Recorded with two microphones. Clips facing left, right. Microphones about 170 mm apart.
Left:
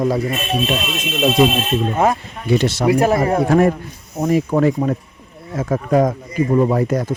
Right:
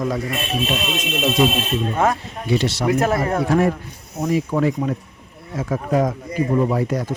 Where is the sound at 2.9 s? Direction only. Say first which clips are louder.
Left 4 dB; 10° left (ahead or behind).